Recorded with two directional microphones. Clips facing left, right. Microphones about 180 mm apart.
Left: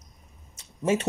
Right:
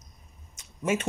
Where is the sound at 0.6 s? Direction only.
35° left (ahead or behind).